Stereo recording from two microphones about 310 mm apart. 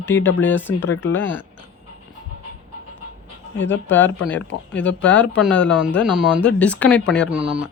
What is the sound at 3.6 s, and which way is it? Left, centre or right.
Speech, left.